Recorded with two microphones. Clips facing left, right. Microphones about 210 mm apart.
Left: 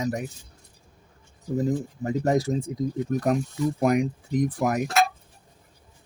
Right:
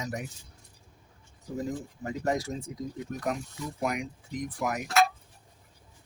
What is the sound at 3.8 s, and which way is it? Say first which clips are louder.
Speech: left 8 dB; 40° left (ahead or behind).